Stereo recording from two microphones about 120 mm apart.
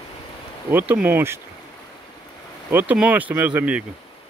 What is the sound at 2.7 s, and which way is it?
Speech, 15° right (ahead or behind).